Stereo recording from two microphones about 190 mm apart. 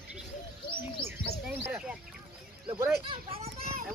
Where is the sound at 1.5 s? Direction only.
10° right (ahead or behind).